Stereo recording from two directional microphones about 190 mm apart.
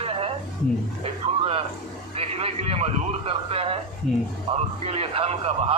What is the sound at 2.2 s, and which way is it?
A man's voice, 30° right (ahead or behind).